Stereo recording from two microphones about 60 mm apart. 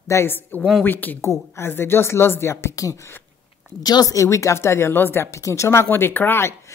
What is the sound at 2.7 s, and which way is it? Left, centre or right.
Speech, left.